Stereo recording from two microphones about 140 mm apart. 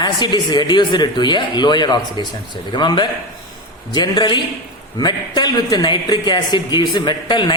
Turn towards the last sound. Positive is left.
turn(degrees=35)  # may be behind; listen again after turning